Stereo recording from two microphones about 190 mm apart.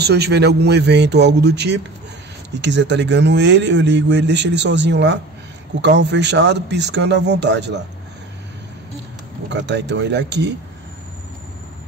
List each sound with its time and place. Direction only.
0.0 s a man's voice: 60° right (ahead or behind)
9.5 s a man's voice: 65° right (ahead or behind)